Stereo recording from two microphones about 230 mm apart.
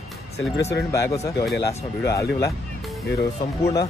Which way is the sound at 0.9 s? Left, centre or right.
Centre.